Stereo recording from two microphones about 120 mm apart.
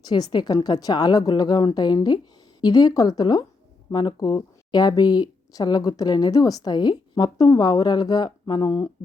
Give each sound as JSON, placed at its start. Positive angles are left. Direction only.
{"t": 0.0, "sound": "speech", "side_deg": 35}